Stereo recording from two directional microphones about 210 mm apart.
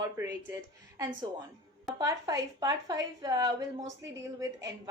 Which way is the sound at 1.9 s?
15° right (ahead or behind).